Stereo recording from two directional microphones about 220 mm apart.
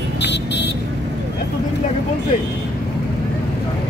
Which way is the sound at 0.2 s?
50° left (ahead or behind).